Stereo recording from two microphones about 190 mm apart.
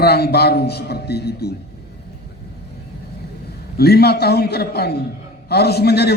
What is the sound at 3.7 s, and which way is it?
Speech, 55° left (ahead or behind).